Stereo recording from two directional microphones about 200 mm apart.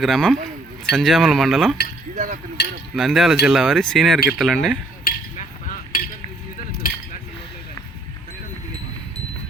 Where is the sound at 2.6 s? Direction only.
55° left (ahead or behind).